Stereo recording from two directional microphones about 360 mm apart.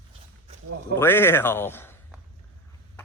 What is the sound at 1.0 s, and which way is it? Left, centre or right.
Speech, centre.